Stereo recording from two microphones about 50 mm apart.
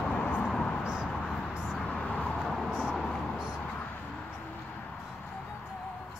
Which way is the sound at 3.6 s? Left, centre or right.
Left.